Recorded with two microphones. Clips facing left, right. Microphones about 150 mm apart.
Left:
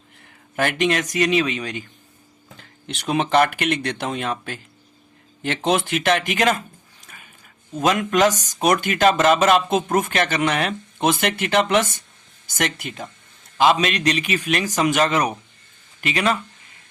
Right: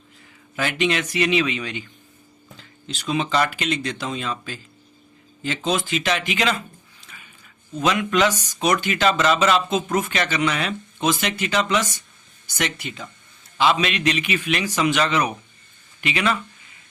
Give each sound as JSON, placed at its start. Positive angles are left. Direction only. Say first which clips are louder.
{"t": 0.3, "sound": "speech", "louder": "left 4 dB", "side_deg": 55}
{"t": 2.6, "sound": "speech", "louder": "left 1 dB", "side_deg": 65}
{"t": 7.0, "sound": "dog", "louder": "left 1 dB", "side_deg": 50}
{"t": 7.8, "sound": "speech", "louder": "left 2 dB", "side_deg": 45}